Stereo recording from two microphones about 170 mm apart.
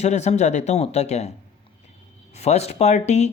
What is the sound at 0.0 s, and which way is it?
Speech, 40° left (ahead or behind).